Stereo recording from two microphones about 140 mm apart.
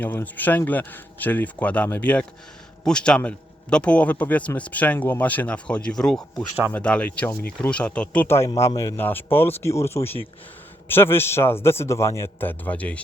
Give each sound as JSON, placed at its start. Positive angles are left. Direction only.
{"t": 0.0, "sound": "a man's voice", "side_deg": 15}